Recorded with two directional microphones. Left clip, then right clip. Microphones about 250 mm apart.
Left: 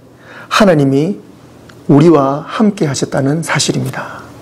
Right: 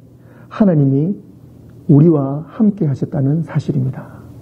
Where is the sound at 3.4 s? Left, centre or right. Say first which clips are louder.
Left 9 dB; centre.